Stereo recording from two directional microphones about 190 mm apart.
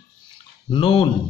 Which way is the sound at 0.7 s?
25° left (ahead or behind).